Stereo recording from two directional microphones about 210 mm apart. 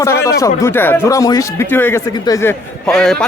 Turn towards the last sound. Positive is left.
turn(degrees=5)  # may be behind; listen again after turning